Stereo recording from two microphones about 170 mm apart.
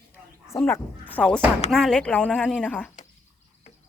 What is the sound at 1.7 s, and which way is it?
Speech, 5° left (ahead or behind).